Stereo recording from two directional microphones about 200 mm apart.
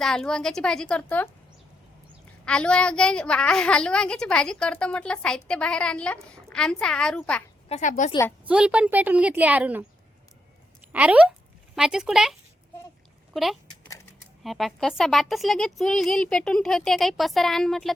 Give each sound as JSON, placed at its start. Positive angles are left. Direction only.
{"t": 0.0, "sound": "a woman's voice", "side_deg": 5}
{"t": 2.4, "sound": "a woman's voice", "side_deg": 5}
{"t": 7.7, "sound": "a woman's voice", "side_deg": 40}
{"t": 8.4, "sound": "a woman's voice", "side_deg": -5}
{"t": 10.9, "sound": "a woman's voice", "side_deg": -5}